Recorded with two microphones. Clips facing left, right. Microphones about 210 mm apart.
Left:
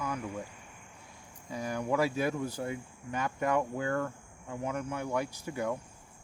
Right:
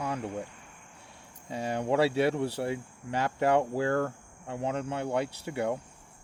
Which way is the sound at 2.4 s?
70° right (ahead or behind).